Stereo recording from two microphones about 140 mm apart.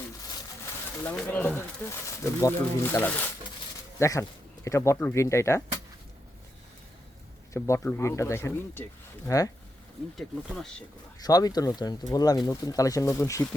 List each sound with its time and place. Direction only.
1.0 s speech: 10° left (ahead or behind)
7.5 s speech: 20° left (ahead or behind)
10.2 s speech: centre (ahead or behind)
11.2 s speech: 25° left (ahead or behind)